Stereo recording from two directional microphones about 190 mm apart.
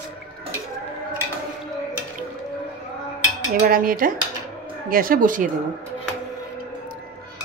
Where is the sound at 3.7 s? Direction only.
50° right (ahead or behind).